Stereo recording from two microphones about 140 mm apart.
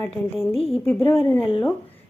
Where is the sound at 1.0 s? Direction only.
15° left (ahead or behind).